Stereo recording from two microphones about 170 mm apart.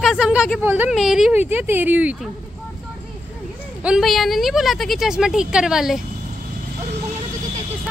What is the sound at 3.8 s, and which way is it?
A woman's voice, centre (ahead or behind).